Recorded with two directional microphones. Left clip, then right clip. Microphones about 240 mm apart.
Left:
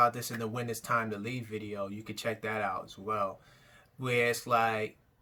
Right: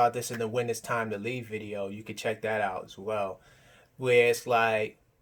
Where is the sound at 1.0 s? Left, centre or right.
Centre.